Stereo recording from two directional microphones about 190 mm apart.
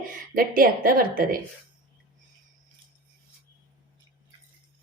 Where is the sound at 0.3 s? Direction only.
50° right (ahead or behind).